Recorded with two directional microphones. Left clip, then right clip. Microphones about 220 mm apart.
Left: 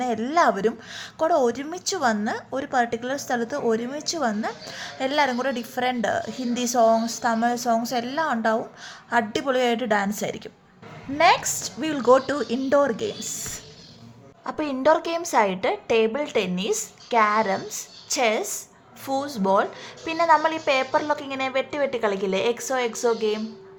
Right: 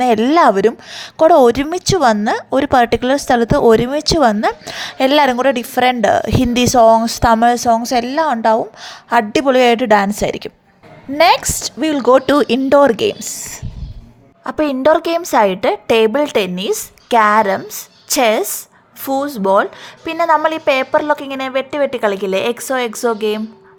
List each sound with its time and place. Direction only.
0.0 s a woman's voice: 35° right (ahead or behind)
14.4 s a woman's voice: 30° right (ahead or behind)